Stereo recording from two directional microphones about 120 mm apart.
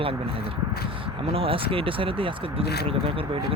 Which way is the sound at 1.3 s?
50° right (ahead or behind).